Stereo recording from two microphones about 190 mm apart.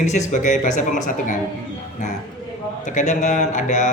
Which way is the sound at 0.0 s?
40° left (ahead or behind).